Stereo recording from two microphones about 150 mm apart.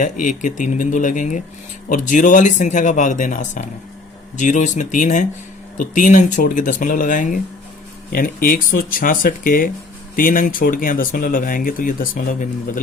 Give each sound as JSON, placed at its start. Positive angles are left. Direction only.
{"t": 0.0, "sound": "speech", "side_deg": 60}
{"t": 8.1, "sound": "speech", "side_deg": 70}